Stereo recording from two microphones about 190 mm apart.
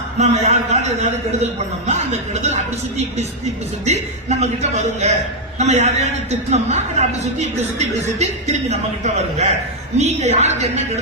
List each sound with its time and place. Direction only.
0.2 s a man's voice: 35° right (ahead or behind)